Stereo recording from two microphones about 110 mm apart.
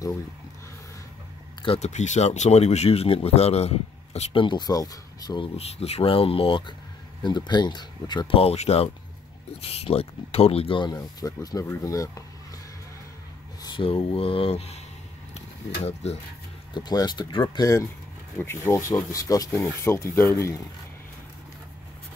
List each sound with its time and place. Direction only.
1.8 s speech: 90° left; by 4.4 s 70° left (ahead or behind)
4.4 s speech: 45° left (ahead or behind)
5.6 s speech: 65° left (ahead or behind)
7.2 s speech: 45° left (ahead or behind)
8.4 s speech: 70° left (ahead or behind)
10.8 s speech: 40° left (ahead or behind)
13.7 s speech: 60° left (ahead or behind); by 16.2 s 75° left (ahead or behind)
16.7 s speech: 40° left (ahead or behind)
18.4 s speech: 20° left (ahead or behind)